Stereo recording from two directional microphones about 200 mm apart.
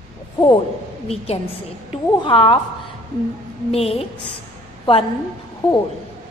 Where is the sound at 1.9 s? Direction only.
25° left (ahead or behind).